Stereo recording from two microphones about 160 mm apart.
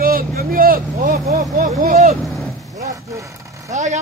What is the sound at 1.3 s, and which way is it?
Vehicle, 50° right (ahead or behind).